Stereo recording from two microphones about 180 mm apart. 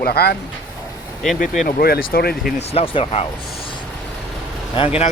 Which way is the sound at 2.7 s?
30° left (ahead or behind).